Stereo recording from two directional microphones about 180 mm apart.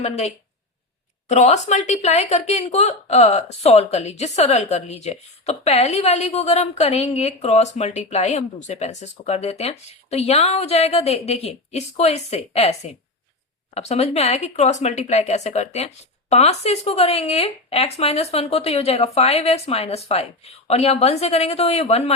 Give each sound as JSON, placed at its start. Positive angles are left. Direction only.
{"t": 1.3, "sound": "a woman's voice", "side_deg": 40}